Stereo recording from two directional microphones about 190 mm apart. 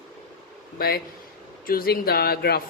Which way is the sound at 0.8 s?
55° left (ahead or behind).